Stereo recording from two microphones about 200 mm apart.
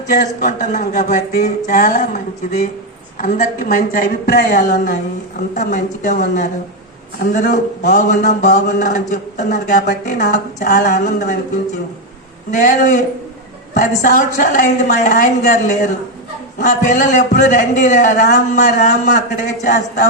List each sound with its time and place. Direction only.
0.1 s a man's voice: 45° left (ahead or behind)
12.5 s a man's voice: 40° left (ahead or behind)